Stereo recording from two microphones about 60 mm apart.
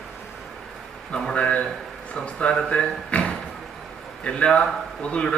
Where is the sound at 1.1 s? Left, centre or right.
Centre.